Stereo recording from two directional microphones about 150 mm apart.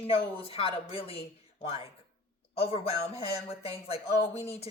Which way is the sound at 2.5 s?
40° left (ahead or behind).